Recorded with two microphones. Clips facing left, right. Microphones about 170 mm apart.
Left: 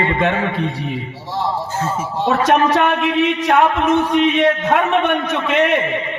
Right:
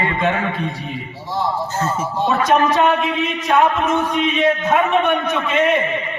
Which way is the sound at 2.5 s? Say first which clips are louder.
Even; 70° left (ahead or behind).